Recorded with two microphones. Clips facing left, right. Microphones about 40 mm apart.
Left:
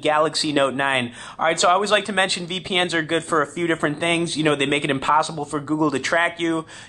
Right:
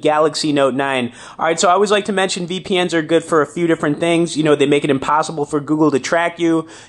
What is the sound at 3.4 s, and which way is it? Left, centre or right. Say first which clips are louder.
Speech: right 6 dB; left.